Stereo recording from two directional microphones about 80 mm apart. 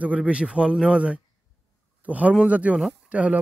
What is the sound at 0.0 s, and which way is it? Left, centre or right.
A man's voice, centre.